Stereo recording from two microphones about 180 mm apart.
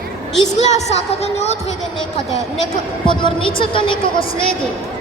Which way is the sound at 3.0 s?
25° left (ahead or behind).